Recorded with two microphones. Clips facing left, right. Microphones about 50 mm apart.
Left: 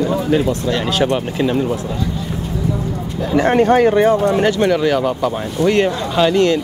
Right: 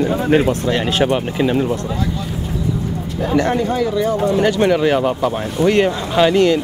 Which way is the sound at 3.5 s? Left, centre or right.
Left.